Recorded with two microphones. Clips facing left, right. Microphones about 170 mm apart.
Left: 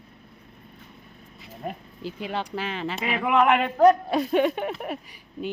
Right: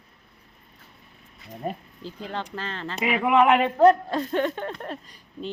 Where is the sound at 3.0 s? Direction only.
5° right (ahead or behind).